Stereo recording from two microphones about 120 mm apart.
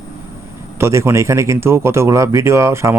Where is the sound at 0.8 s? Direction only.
25° right (ahead or behind).